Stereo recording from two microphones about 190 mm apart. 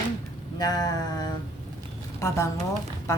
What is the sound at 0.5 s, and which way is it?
Speech, 20° left (ahead or behind).